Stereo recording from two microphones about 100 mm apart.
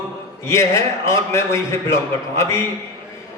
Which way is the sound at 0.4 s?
25° left (ahead or behind).